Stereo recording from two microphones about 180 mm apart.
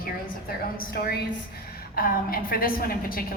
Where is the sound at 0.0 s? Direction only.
55° left (ahead or behind).